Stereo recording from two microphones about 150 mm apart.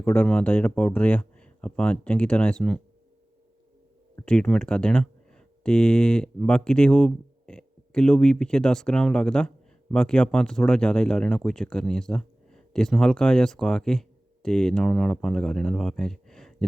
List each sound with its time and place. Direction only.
0.0 s speech: 10° left (ahead or behind)
4.3 s speech: 5° left (ahead or behind)